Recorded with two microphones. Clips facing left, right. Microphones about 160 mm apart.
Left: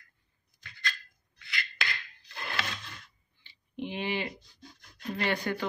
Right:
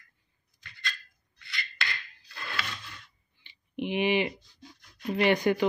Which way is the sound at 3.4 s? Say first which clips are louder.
Right 4 dB; 15° right (ahead or behind).